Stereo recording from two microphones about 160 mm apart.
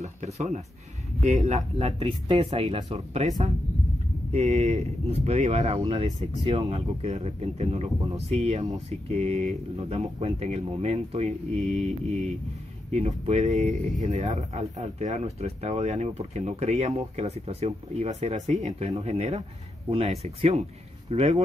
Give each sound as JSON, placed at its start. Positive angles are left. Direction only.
{"t": 0.0, "sound": "speech", "side_deg": -45}